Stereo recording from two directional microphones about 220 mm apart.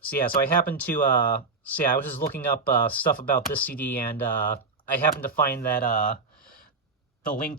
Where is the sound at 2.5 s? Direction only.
40° left (ahead or behind).